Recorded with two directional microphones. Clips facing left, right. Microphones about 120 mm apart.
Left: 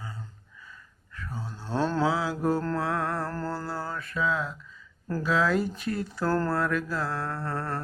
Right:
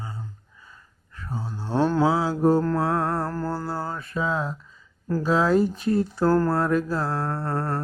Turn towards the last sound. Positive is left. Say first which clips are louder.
# right 5 dB
turn(degrees=-25)  # may be behind; listen again after turning